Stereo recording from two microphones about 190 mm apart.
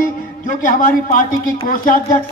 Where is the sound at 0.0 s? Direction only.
45° left (ahead or behind).